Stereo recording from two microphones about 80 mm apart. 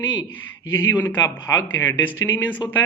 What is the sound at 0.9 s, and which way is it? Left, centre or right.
Speech, left.